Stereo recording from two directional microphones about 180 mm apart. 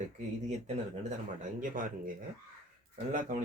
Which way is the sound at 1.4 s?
50° right (ahead or behind).